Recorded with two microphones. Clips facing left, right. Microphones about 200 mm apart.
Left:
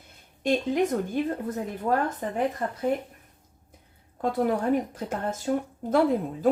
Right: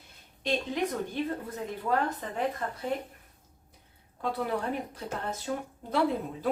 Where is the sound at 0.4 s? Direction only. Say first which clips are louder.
Left 6 dB; 50° left (ahead or behind).